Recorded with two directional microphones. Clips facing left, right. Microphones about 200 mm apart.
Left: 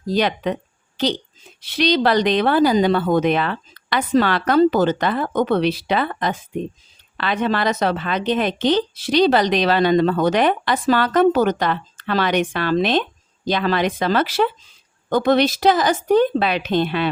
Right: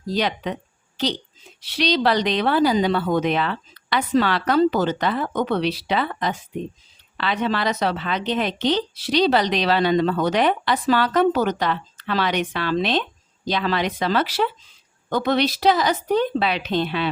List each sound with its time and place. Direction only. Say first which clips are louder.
0.1 s speech: left 4 dB; 55° left (ahead or behind)
1.6 s a woman's voice: left 3 dB; 50° left (ahead or behind)